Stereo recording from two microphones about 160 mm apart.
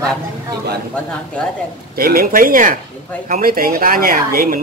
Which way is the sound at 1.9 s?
70° right (ahead or behind).